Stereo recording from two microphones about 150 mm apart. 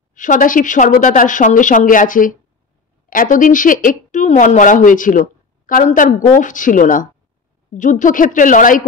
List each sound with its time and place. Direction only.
0.1 s a woman's voice: 60° left (ahead or behind)